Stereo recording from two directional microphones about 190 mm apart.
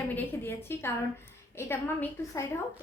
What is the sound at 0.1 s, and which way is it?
A woman's voice, 10° left (ahead or behind).